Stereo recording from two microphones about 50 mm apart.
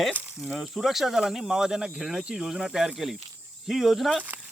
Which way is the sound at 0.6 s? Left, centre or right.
Centre.